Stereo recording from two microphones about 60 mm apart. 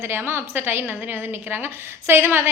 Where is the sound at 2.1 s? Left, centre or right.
Right.